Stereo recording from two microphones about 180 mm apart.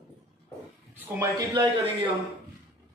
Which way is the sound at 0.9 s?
15° right (ahead or behind).